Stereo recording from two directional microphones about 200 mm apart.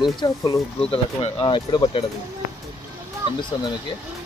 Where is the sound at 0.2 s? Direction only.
20° left (ahead or behind).